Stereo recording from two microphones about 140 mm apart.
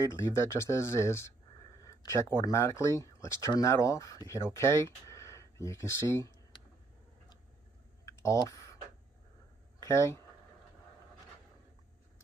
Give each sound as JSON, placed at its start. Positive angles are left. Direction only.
{"t": 0.0, "sound": "speech", "side_deg": 20}
{"t": 8.0, "sound": "computer keyboard", "side_deg": 20}
{"t": 9.8, "sound": "speech", "side_deg": 20}